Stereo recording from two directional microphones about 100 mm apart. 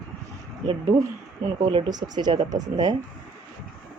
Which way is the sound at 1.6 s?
50° right (ahead or behind).